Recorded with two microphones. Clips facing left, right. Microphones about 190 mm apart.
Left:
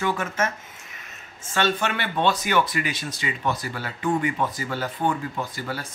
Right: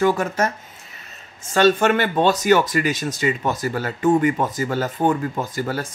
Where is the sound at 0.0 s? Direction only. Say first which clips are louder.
Right 6 dB; 40° right (ahead or behind).